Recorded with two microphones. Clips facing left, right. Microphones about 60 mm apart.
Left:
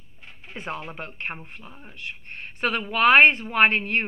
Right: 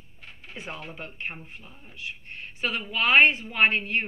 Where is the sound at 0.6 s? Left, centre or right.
Left.